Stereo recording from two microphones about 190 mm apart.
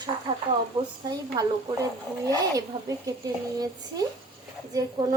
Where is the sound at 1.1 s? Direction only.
20° right (ahead or behind).